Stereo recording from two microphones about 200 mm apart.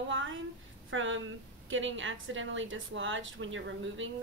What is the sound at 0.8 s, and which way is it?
A woman's voice, 70° right (ahead or behind).